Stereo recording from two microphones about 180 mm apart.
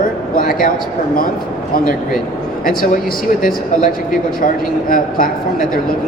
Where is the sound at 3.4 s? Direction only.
50° left (ahead or behind).